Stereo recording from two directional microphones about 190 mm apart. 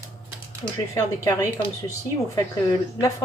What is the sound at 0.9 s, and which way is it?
Speech, 15° left (ahead or behind).